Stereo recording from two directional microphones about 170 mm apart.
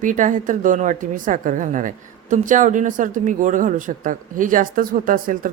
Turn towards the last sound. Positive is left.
turn(degrees=-55)  # may be behind; listen again after turning